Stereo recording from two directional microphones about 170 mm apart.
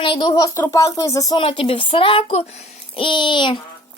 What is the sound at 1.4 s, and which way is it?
A child's voice, 35° left (ahead or behind).